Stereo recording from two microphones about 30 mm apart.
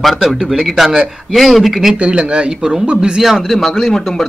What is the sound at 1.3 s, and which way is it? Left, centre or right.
Speech, centre.